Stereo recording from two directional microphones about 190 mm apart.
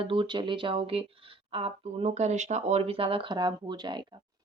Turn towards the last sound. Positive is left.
turn(degrees=-25)  # may be behind; listen again after turning